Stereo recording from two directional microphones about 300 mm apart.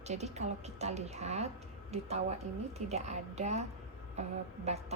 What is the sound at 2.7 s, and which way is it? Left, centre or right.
Speech, right.